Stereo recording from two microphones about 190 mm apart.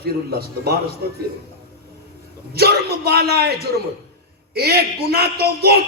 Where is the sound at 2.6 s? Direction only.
55° right (ahead or behind).